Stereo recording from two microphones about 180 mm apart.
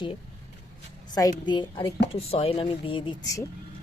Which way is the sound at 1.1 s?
20° left (ahead or behind).